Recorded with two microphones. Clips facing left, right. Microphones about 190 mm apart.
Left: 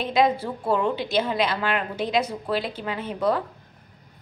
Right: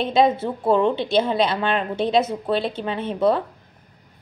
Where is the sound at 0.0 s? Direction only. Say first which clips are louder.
Right 3 dB; 25° right (ahead or behind).